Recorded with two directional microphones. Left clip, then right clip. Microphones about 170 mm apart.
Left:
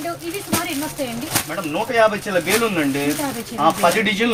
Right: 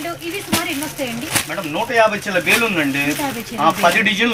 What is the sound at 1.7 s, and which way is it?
Speech, 20° left (ahead or behind).